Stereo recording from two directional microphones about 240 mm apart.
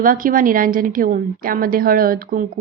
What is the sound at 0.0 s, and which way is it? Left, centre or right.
A woman's voice, right.